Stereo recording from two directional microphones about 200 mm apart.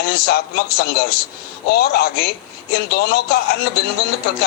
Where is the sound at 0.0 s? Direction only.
50° left (ahead or behind).